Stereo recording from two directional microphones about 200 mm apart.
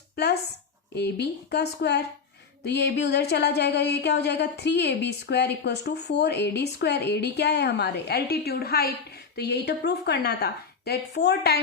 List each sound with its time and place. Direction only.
0.9 s speech: 55° left (ahead or behind)